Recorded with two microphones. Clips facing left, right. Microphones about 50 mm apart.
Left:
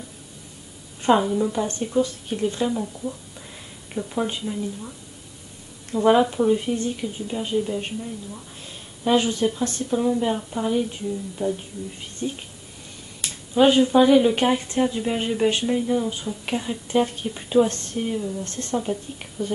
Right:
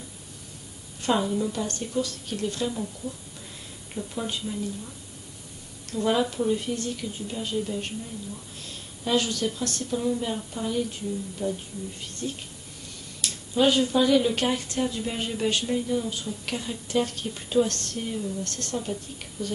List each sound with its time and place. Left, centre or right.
1.0 s a woman's voice: centre
9.0 s a woman's voice: left